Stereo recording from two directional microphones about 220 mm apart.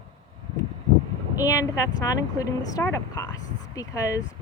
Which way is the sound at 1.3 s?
15° left (ahead or behind).